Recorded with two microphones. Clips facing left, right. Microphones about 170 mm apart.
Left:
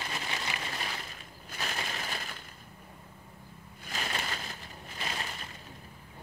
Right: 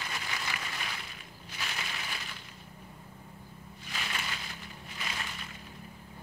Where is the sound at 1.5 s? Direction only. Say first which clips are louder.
Left 3 dB; 40° left (ahead or behind).